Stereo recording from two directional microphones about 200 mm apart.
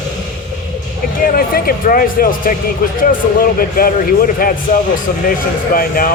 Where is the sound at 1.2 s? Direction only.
45° left (ahead or behind).